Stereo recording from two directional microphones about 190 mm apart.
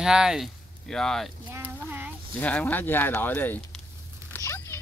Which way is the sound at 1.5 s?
10° right (ahead or behind).